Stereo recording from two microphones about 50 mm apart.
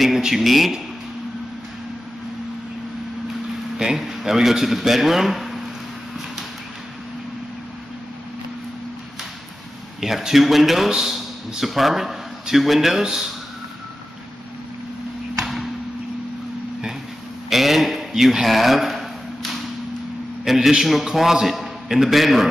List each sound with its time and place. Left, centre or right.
0.0 s speech: centre
3.7 s speech: centre
9.9 s a man's voice: centre
15.4 s a sound: centre
17.5 s a sound: centre
20.4 s a man's voice: centre